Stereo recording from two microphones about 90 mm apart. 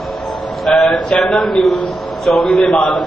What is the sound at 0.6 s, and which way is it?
A man's voice, 5° left (ahead or behind).